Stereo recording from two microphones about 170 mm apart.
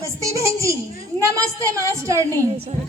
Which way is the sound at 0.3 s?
20° right (ahead or behind).